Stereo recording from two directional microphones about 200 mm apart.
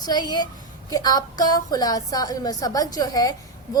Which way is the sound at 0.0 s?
20° left (ahead or behind).